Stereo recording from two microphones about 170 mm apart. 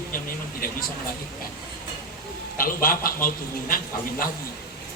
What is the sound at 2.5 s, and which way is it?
A man's voice, 55° left (ahead or behind).